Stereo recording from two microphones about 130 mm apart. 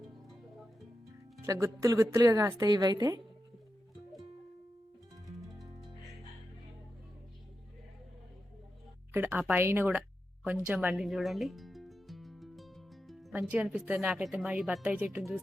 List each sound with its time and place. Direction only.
1.4 s a woman's voice: 25° right (ahead or behind)
5.4 s music: centre (ahead or behind)
9.1 s a woman's voice: 15° right (ahead or behind)
10.4 s music: 10° right (ahead or behind)
13.4 s a woman's voice: 5° right (ahead or behind)